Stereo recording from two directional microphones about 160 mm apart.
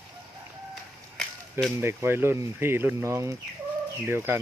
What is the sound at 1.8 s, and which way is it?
Speech, 15° right (ahead or behind).